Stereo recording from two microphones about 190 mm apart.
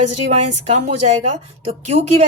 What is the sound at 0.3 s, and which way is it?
Speech, 35° right (ahead or behind).